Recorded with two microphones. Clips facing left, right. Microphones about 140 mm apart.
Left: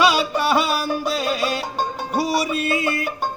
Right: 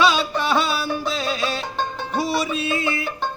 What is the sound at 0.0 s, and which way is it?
Music, 10° left (ahead or behind).